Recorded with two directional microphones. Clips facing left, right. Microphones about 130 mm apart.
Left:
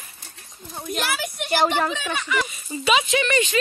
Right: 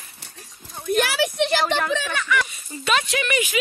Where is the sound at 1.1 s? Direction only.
85° right.